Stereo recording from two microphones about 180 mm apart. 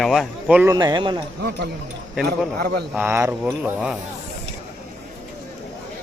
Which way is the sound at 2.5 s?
60° right (ahead or behind).